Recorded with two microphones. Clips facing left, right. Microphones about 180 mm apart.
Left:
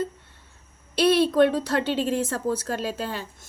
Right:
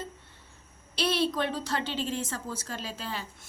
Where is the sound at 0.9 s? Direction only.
60° left (ahead or behind).